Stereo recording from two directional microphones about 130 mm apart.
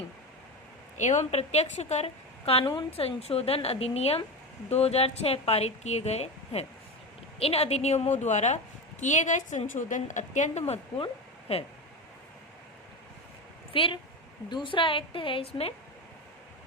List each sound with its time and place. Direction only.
0.9 s a woman's voice: 65° left (ahead or behind)
2.4 s a woman's voice: 45° left (ahead or behind); by 10.6 s 70° left (ahead or behind)
10.7 s speech: 45° left (ahead or behind)
13.7 s a woman's voice: 45° left (ahead or behind)